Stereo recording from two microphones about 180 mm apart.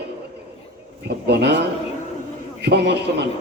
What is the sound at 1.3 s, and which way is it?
Speech, 65° right (ahead or behind).